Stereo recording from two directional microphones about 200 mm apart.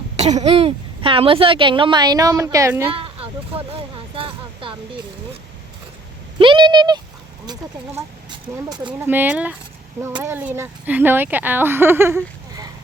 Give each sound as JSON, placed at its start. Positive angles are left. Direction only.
{"t": 0.2, "sound": "a woman's voice", "side_deg": -35}
{"t": 2.9, "sound": "a sound", "side_deg": -25}
{"t": 6.4, "sound": "a woman's voice", "side_deg": -25}
{"t": 9.0, "sound": "speech", "side_deg": -10}
{"t": 10.0, "sound": "speech", "side_deg": -15}